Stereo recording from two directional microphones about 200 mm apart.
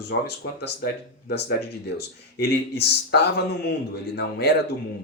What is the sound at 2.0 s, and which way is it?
Speech, 55° left (ahead or behind).